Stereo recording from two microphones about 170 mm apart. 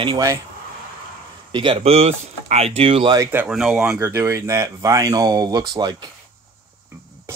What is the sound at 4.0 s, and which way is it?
Speech, 15° right (ahead or behind).